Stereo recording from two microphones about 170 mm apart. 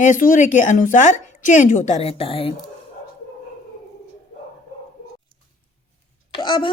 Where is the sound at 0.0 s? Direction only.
50° left (ahead or behind); by 2.6 s 30° left (ahead or behind).